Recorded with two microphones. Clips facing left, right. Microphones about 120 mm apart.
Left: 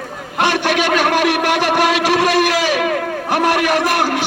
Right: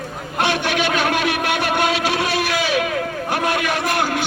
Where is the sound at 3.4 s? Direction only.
90° left.